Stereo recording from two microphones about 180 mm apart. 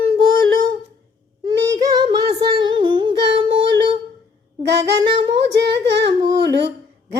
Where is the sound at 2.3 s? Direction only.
25° right (ahead or behind).